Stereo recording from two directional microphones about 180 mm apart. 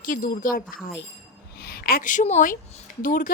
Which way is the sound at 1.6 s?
60° left (ahead or behind).